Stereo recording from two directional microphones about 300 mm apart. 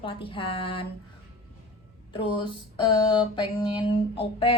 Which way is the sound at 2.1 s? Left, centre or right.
Centre.